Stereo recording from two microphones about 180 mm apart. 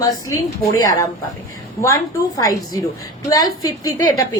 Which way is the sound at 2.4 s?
20° left (ahead or behind).